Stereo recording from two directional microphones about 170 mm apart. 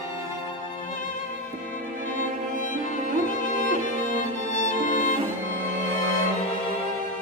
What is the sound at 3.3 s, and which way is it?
Music, 50° left (ahead or behind).